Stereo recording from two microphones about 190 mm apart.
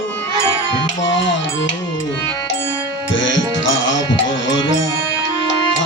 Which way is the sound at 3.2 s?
75° left (ahead or behind).